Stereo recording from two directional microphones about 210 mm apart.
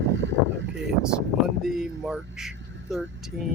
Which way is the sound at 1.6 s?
Centre (ahead or behind).